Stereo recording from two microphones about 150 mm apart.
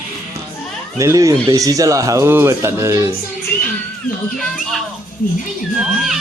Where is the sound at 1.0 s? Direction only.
20° right (ahead or behind).